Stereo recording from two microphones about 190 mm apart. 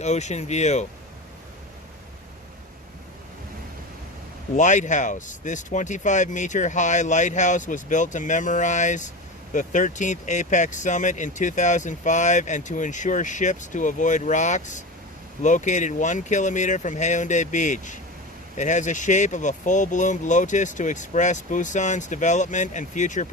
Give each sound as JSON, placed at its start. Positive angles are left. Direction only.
{"t": 0.0, "sound": "speech", "side_deg": 35}
{"t": 4.5, "sound": "speech", "side_deg": 40}